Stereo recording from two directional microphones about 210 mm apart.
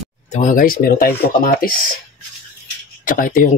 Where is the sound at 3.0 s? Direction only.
40° left (ahead or behind).